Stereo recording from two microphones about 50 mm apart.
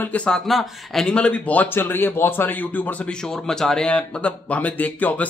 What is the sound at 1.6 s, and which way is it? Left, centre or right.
A man's voice, left.